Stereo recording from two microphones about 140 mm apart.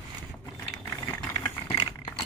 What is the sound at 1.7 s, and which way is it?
Vehicle, 35° left (ahead or behind).